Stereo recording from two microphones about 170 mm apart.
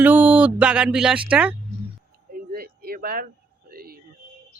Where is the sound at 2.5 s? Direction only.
60° right (ahead or behind).